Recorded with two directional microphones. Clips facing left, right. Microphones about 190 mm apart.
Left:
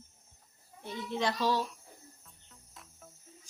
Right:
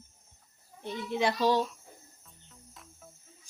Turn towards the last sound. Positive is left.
turn(degrees=0)  # may be behind; listen again after turning